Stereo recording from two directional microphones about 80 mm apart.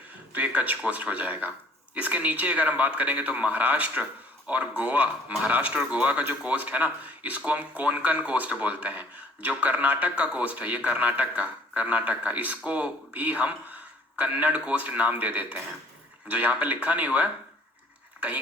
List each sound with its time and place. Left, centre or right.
0.3 s speech: centre